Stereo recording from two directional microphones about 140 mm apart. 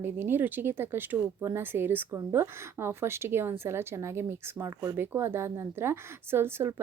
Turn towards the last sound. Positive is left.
turn(degrees=-15)  # may be behind; listen again after turning